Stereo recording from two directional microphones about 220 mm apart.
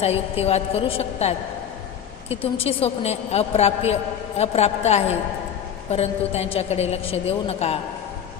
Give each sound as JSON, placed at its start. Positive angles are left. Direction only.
{"t": 0.0, "sound": "a woman's voice", "side_deg": 30}